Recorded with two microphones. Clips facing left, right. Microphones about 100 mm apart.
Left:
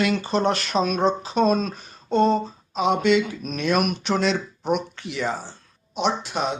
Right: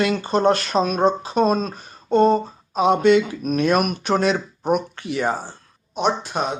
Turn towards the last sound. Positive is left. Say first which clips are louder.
# right 2 dB
turn(degrees=-45)  # may be behind; listen again after turning